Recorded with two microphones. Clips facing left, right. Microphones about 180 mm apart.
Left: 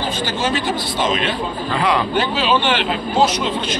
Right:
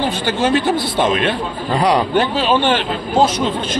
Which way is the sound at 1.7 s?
40° right (ahead or behind).